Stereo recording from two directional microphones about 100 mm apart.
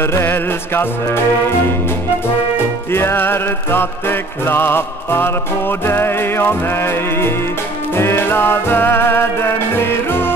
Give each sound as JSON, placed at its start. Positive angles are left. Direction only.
{"t": 0.0, "sound": "music", "side_deg": 25}
{"t": 2.9, "sound": "music", "side_deg": 25}